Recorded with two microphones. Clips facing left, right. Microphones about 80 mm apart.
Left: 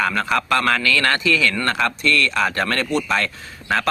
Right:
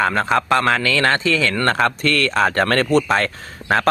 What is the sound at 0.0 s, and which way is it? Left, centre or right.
A man's voice, right.